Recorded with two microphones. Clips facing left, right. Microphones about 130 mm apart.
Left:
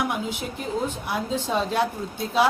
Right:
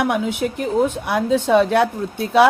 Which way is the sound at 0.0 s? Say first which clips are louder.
Right 7 dB; 65° right (ahead or behind).